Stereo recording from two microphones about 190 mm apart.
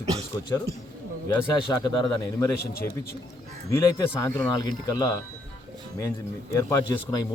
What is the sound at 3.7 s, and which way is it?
A man's voice, 15° left (ahead or behind).